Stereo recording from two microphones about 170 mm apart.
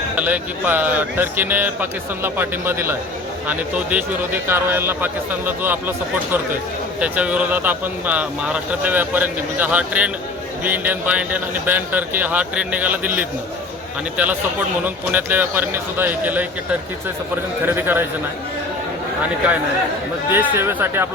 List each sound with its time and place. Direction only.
0.2 s speech: 10° right (ahead or behind)
7.0 s speech: 5° right (ahead or behind)
17.7 s speech: 10° right (ahead or behind)
20.3 s speech: 10° right (ahead or behind)